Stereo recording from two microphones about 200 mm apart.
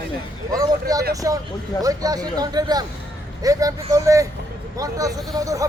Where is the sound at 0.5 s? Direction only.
15° right (ahead or behind).